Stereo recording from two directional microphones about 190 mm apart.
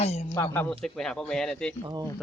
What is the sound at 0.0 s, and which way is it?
Speech, 35° left (ahead or behind).